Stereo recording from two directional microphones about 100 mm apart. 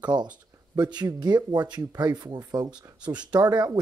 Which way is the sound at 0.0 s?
45° right (ahead or behind).